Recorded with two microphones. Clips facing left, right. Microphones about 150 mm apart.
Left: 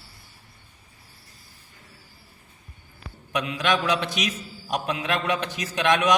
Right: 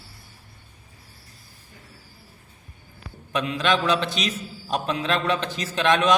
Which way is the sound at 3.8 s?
15° left (ahead or behind).